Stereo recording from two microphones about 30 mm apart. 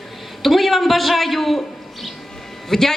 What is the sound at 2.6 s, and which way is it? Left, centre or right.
Speech, centre.